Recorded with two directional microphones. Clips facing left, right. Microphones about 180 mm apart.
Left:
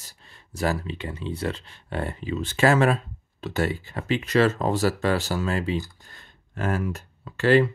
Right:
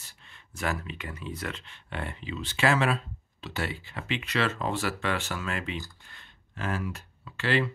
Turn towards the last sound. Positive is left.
turn(degrees=45)  # may be behind; listen again after turning